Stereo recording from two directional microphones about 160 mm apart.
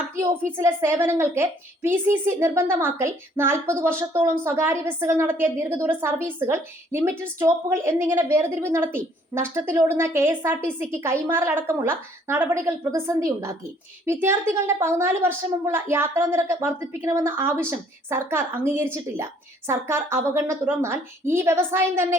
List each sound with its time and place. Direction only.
0.2 s a woman's voice: 15° right (ahead or behind)